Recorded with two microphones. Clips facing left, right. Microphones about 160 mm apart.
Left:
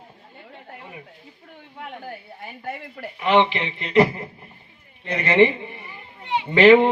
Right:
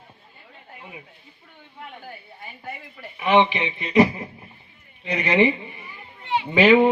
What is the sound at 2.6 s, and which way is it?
Speech, 65° left (ahead or behind).